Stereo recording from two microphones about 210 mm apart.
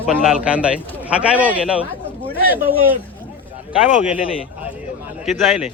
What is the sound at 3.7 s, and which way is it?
Speech, 5° right (ahead or behind).